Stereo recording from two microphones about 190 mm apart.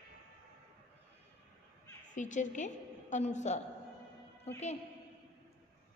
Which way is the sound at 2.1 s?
40° left (ahead or behind).